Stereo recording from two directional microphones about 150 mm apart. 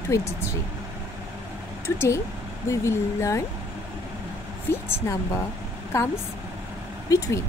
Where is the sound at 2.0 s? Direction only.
20° left (ahead or behind).